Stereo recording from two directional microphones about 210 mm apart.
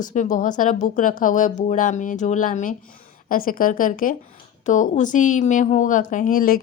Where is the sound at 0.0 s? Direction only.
35° left (ahead or behind).